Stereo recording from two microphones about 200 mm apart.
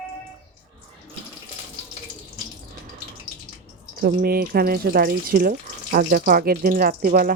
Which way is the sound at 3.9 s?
50° right (ahead or behind).